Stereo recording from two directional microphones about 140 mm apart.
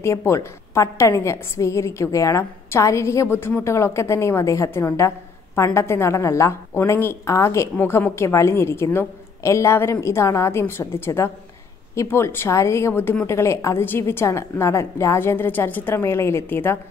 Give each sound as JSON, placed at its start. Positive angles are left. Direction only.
{"t": 0.0, "sound": "a woman's voice", "side_deg": 20}